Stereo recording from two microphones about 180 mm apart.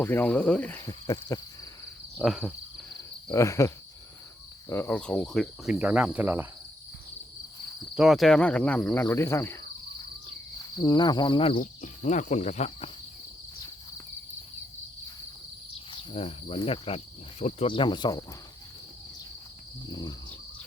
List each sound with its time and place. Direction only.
0.0 s speech: 10° left (ahead or behind)
2.1 s speech: centre (ahead or behind)
3.3 s speech: 15° left (ahead or behind)
4.7 s cricket: 10° left (ahead or behind); by 6.5 s 10° right (ahead or behind)
7.9 s speech: centre (ahead or behind); by 9.6 s 15° left (ahead or behind)
10.6 s cricket: 25° left (ahead or behind)
11.5 s cricket: 45° left (ahead or behind)
15.9 s speech: 30° left (ahead or behind)
16.6 s cricket: 30° left (ahead or behind)
19.9 s cricket: 20° left (ahead or behind)